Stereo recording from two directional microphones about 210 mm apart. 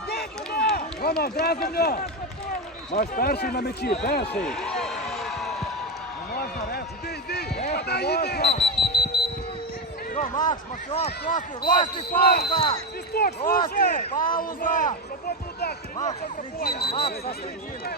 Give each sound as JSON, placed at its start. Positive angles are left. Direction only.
{"t": 0.1, "sound": "run", "side_deg": 50}
{"t": 1.2, "sound": "speech", "side_deg": 50}
{"t": 4.4, "sound": "basketball bounce", "side_deg": 5}
{"t": 6.3, "sound": "basketball bounce", "side_deg": 45}
{"t": 7.3, "sound": "run", "side_deg": 50}
{"t": 7.7, "sound": "a sound", "side_deg": 50}
{"t": 8.8, "sound": "alarm", "side_deg": 50}
{"t": 10.2, "sound": "run", "side_deg": 40}
{"t": 10.5, "sound": "speech", "side_deg": 30}
{"t": 12.5, "sound": "speech", "side_deg": 20}
{"t": 13.1, "sound": "speech", "side_deg": 50}
{"t": 16.6, "sound": "speech", "side_deg": 45}